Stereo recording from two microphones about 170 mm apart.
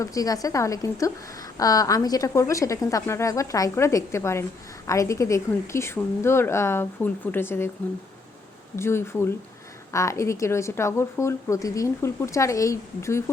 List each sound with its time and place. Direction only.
0.0 s a woman's voice: 20° left (ahead or behind)
8.7 s a woman's voice: 15° left (ahead or behind)